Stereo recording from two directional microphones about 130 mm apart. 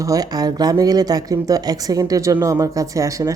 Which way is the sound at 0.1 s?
30° right (ahead or behind).